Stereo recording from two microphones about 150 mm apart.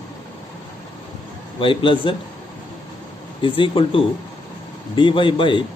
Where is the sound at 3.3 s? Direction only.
35° left (ahead or behind).